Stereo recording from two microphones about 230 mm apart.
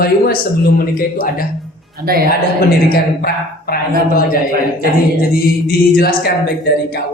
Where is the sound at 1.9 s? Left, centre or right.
Right.